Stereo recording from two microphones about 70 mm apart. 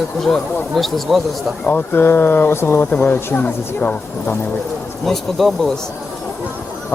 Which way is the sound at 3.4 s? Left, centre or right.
Left.